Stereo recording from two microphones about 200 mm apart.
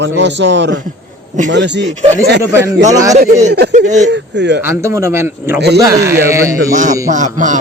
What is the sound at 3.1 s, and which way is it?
Speech, 35° right (ahead or behind).